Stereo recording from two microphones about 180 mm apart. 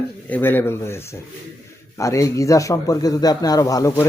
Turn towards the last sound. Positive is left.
turn(degrees=20)  # may be behind; listen again after turning